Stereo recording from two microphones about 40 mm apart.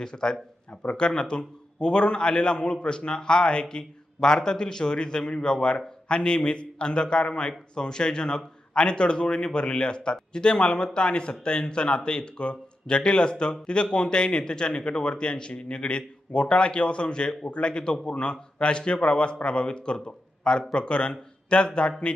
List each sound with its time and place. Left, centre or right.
0.0 s a man's voice: centre